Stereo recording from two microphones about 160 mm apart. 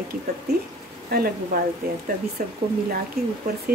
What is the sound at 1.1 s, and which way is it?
Speech, 65° right (ahead or behind).